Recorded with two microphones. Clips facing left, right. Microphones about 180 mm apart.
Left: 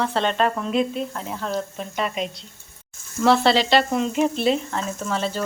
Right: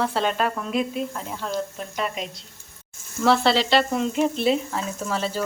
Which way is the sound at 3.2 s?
Centre (ahead or behind).